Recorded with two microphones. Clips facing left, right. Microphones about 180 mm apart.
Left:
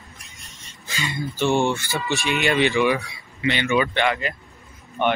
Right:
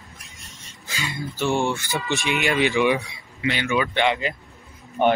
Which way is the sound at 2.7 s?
20° right (ahead or behind).